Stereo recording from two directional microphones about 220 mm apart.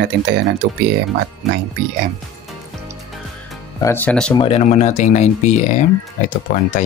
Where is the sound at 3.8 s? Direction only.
10° left (ahead or behind).